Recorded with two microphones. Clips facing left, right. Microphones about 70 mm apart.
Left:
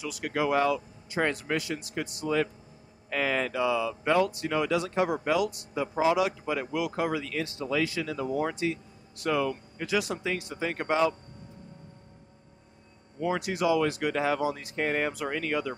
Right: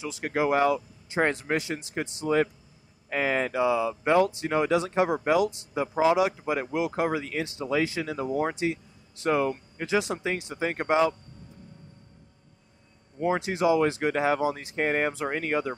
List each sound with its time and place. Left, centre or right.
0.0 s speech: right
13.2 s speech: right